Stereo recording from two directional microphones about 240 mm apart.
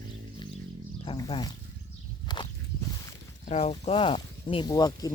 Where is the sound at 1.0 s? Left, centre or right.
Centre.